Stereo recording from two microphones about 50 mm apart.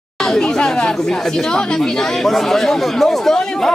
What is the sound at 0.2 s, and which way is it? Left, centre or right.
Speech, centre.